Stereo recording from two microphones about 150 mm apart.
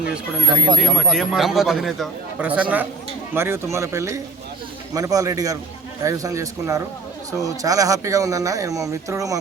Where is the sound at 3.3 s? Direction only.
15° right (ahead or behind).